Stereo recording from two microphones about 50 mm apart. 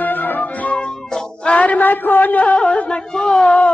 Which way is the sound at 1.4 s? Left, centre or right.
Left.